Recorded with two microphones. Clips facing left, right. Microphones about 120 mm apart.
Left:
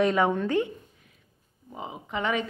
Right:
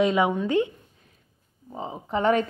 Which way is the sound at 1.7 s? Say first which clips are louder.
Right 5 dB; 35° right (ahead or behind).